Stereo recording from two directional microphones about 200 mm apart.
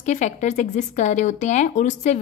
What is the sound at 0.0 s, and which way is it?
Speech, 35° left (ahead or behind).